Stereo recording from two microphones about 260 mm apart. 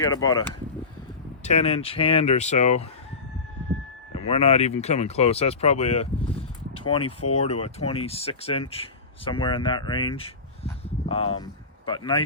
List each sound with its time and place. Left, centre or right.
0.0 s speech: centre
4.1 s speech: left